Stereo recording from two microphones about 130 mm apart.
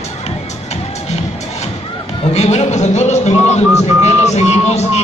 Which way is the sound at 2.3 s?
55° left (ahead or behind).